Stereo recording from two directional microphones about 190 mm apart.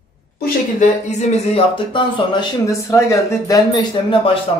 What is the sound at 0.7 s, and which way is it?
Speech, 35° left (ahead or behind).